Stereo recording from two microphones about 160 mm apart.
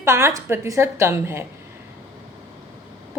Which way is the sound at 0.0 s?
15° right (ahead or behind).